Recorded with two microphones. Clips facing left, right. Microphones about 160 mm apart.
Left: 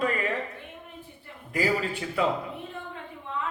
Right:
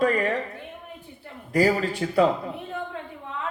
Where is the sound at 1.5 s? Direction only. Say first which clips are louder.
Right 5 dB; 40° right (ahead or behind).